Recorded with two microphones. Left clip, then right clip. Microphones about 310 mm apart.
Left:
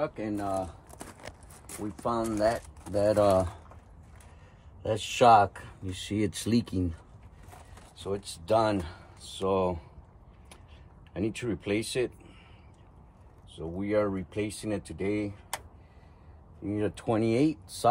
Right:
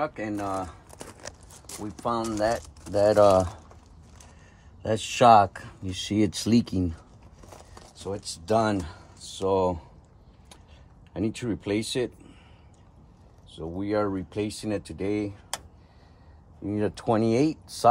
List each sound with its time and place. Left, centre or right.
0.0 s speech: centre
1.7 s speech: centre
4.8 s speech: right
8.0 s speech: right
11.1 s speech: right
13.6 s speech: right
16.6 s speech: right